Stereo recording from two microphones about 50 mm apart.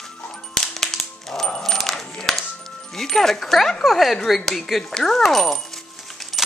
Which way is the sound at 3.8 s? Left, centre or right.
Centre.